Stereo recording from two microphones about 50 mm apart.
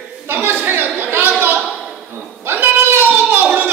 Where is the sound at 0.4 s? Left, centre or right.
Right.